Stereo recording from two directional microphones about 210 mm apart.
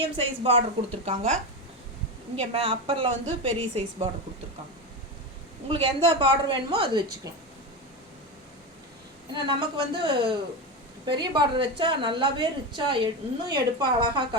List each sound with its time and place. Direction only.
0.2 s a woman's voice: 25° right (ahead or behind)
5.6 s a woman's voice: 25° right (ahead or behind)
9.3 s a woman's voice: 20° right (ahead or behind)